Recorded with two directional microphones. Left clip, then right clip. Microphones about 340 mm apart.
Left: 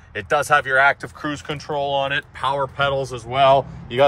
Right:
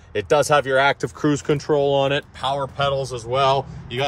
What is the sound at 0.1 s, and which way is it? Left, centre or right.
Speech, centre.